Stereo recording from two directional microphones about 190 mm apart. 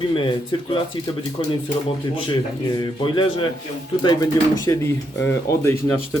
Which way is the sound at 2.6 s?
20° left (ahead or behind).